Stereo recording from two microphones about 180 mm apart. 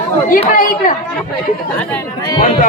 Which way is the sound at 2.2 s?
25° left (ahead or behind).